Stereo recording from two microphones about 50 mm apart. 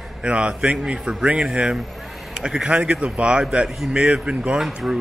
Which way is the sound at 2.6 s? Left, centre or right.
Right.